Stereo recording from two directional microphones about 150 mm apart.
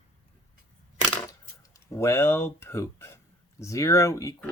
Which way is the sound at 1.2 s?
20° left (ahead or behind).